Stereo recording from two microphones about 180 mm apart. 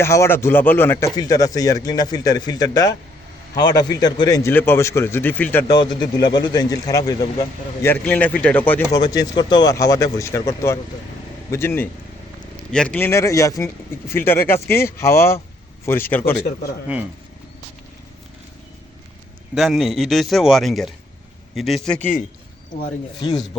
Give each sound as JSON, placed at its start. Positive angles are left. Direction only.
{"t": 0.0, "sound": "a man's voice", "side_deg": 15}
{"t": 5.7, "sound": "a man's voice", "side_deg": 25}
{"t": 8.9, "sound": "a man's voice", "side_deg": 20}
{"t": 16.9, "sound": "speech", "side_deg": -5}
{"t": 19.5, "sound": "a man's voice", "side_deg": 0}